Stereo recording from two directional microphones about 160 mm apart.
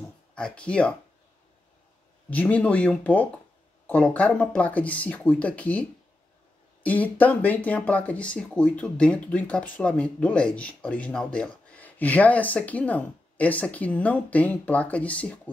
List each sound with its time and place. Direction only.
0.3 s speech: 5° left (ahead or behind)
2.2 s speech: 10° left (ahead or behind)